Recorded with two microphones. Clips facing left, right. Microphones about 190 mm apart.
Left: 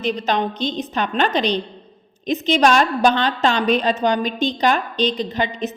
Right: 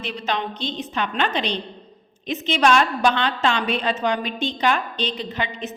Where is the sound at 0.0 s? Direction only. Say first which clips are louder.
Left 6 dB; 40° left (ahead or behind).